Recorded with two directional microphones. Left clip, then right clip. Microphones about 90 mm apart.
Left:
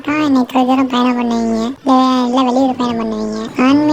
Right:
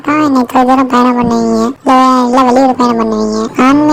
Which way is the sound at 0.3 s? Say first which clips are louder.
Right 5 dB; 20° right (ahead or behind).